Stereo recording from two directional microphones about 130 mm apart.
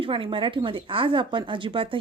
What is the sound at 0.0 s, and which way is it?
Speech, 40° right (ahead or behind).